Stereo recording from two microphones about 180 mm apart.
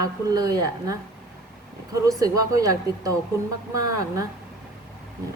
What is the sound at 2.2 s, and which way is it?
A woman's voice, 20° right (ahead or behind).